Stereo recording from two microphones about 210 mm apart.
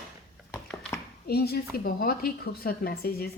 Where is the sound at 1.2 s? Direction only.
50° left (ahead or behind).